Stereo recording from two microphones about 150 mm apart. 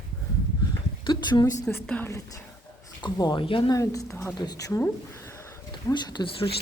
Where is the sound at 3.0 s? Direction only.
30° left (ahead or behind).